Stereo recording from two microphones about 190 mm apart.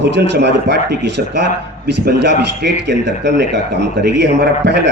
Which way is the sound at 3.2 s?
65° right (ahead or behind).